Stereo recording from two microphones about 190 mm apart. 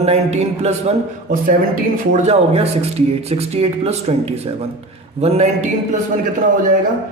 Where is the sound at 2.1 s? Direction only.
35° right (ahead or behind).